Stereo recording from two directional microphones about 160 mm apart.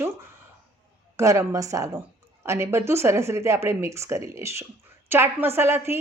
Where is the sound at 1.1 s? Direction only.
20° right (ahead or behind).